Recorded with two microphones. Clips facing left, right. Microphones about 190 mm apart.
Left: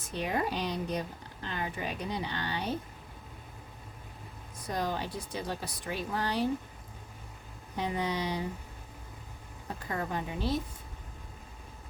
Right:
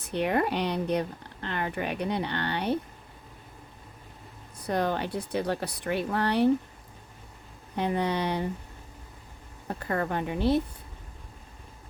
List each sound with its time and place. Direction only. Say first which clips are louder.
0.0 s speech: right 6 dB; 65° right (ahead or behind)
4.6 s speech: right 6 dB; 65° right (ahead or behind)
7.8 s speech: right 5 dB; 60° right (ahead or behind)
9.6 s speech: right 6 dB; 60° right (ahead or behind)